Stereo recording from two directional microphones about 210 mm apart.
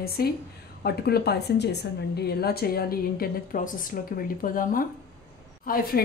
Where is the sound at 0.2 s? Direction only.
45° left (ahead or behind).